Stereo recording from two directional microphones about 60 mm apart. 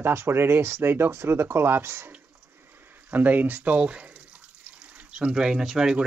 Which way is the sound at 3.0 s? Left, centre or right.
Right.